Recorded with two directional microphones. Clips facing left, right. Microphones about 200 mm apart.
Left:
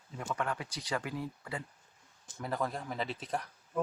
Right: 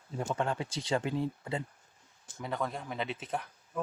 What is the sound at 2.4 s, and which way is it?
Speech, centre (ahead or behind).